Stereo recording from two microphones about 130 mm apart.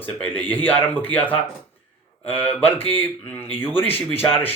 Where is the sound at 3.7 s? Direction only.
45° left (ahead or behind).